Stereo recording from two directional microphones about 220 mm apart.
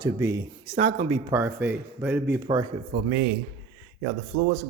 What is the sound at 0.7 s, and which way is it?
Speech, 30° right (ahead or behind).